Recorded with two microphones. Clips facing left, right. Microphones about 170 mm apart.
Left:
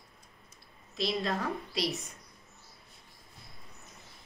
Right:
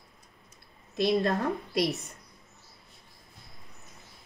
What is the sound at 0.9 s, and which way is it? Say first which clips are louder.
Speech: right 6 dB; 50° right (ahead or behind).